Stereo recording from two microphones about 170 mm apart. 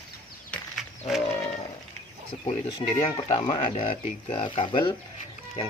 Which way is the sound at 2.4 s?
40° left (ahead or behind).